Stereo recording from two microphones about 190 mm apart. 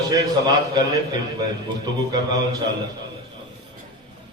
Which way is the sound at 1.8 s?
20° right (ahead or behind).